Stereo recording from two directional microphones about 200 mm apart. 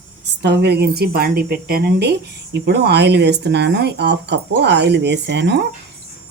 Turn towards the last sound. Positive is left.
turn(degrees=-55)  # may be behind; listen again after turning